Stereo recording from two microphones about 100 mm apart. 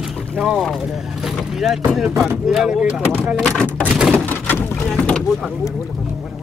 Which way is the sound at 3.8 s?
15° right (ahead or behind).